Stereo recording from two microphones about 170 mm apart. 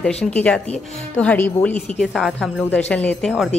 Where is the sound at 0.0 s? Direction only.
5° left (ahead or behind).